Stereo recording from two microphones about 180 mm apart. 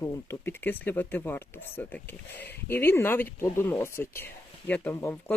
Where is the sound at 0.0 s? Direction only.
10° left (ahead or behind).